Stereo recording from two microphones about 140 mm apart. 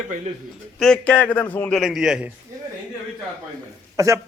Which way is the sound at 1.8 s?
5° right (ahead or behind).